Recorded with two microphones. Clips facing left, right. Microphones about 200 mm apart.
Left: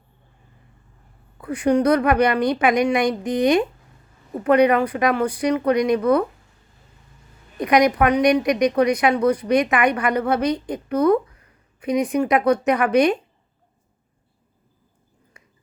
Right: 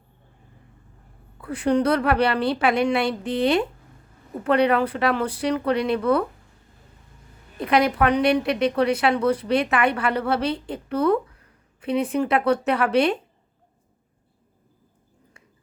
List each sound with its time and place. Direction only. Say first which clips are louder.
1.4 s a woman's voice: left 2 dB; 15° left (ahead or behind)
7.6 s a woman's voice: left 3 dB; 15° left (ahead or behind)
15.3 s a sound: left 3 dB; 15° left (ahead or behind)